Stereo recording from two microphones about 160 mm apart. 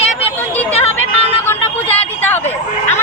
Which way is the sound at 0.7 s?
40° left (ahead or behind).